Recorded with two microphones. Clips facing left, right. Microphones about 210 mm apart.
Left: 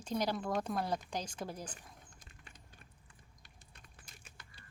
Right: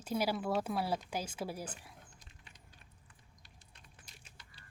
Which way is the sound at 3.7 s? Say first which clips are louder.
Left 1 dB; 50° left (ahead or behind).